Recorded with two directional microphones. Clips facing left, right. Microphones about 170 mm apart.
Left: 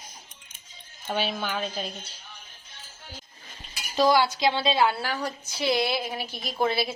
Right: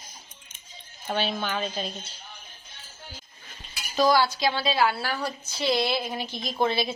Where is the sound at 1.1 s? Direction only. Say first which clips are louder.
Right 1 dB; 5° left (ahead or behind).